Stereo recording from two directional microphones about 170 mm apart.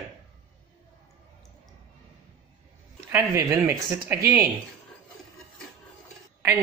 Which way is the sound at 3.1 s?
15° right (ahead or behind).